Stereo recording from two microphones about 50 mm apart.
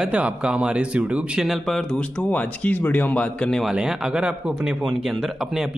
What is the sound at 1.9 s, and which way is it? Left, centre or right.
Speech, left.